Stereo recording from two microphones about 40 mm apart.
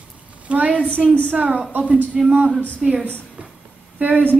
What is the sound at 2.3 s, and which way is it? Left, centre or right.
Speech, right.